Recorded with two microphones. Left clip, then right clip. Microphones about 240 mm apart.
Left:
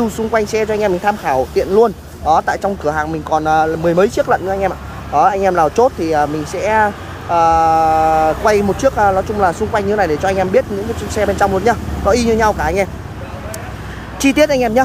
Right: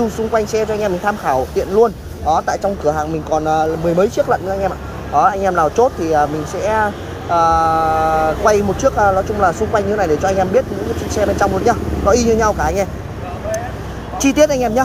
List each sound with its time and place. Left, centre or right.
0.4 s speech: centre
1.8 s speech: left
3.3 s speech: centre
8.9 s speech: left
12.4 s speech: left
14.2 s speech: centre